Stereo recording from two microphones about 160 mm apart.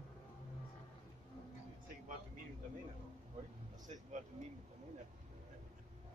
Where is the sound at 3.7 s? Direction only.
50° right (ahead or behind).